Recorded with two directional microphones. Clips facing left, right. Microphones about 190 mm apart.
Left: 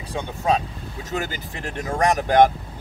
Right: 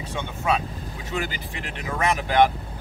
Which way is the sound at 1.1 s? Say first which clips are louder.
Left 1 dB; 45° left (ahead or behind).